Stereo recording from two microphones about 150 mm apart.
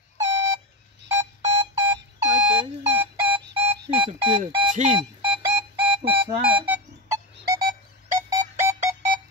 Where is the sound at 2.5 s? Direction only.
35° right (ahead or behind).